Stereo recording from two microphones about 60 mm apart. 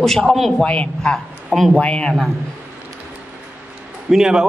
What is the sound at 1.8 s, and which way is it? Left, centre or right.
Speech, centre.